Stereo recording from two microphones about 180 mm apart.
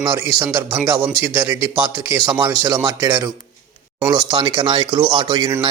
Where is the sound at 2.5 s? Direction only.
25° right (ahead or behind).